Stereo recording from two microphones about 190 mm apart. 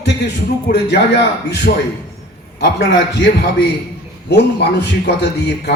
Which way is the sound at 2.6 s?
60° left (ahead or behind).